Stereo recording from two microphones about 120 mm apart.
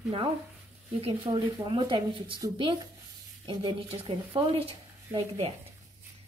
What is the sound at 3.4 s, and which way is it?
Speech, 45° right (ahead or behind).